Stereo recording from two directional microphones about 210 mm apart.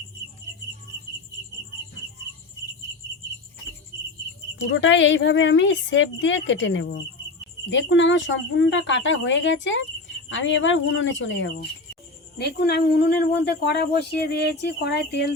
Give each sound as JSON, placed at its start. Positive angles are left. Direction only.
{"t": 4.5, "sound": "a woman's voice", "side_deg": 60}